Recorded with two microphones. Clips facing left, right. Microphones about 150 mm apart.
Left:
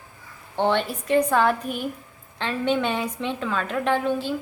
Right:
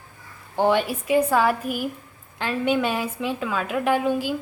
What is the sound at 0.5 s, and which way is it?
A woman's voice, 10° right (ahead or behind).